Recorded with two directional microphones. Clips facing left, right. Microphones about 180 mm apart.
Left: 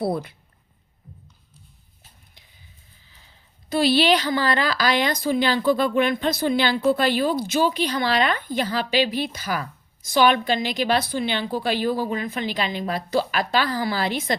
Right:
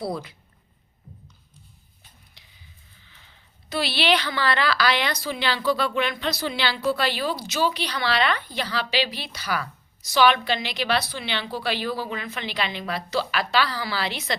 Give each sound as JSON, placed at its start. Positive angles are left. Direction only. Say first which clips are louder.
{"t": 0.0, "sound": "speech", "louder": "left 5 dB", "side_deg": 55}
{"t": 3.7, "sound": "a woman's voice", "louder": "left 5 dB", "side_deg": 45}